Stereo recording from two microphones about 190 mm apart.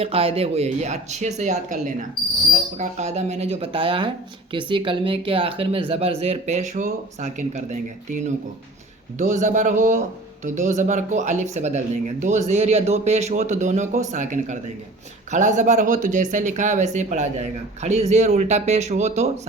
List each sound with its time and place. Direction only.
0.0 s speech: 30° right (ahead or behind)